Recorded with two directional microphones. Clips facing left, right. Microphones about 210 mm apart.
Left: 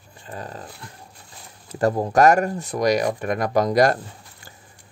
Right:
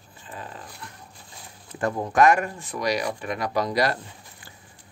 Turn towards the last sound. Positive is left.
turn(degrees=45)  # may be behind; listen again after turning